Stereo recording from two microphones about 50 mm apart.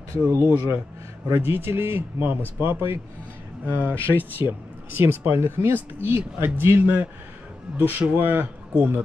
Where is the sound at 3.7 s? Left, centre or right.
Left.